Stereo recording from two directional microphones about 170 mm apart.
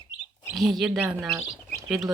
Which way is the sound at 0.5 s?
Centre (ahead or behind).